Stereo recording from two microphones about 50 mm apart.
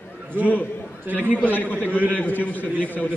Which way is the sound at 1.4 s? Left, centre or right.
Left.